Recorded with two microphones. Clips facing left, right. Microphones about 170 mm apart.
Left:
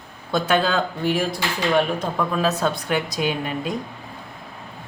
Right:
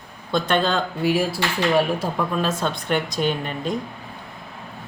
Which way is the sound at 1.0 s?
5° right (ahead or behind).